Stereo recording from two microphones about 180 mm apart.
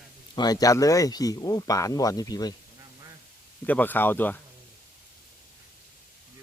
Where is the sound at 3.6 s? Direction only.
10° left (ahead or behind).